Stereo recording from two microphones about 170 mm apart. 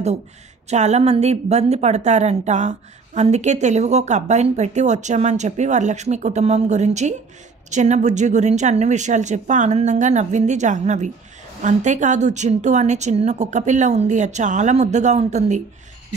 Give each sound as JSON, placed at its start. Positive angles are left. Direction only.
{"t": 0.7, "sound": "a woman's voice", "side_deg": -40}